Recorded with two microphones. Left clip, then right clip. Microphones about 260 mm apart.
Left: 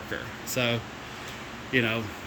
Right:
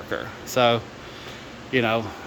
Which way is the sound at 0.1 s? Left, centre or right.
Centre.